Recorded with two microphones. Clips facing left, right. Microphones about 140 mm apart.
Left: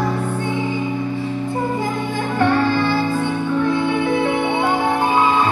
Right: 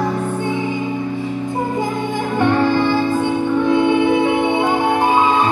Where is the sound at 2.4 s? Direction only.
20° right (ahead or behind).